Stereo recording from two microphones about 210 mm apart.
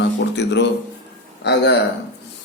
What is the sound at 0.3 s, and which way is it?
Speech, 55° left (ahead or behind).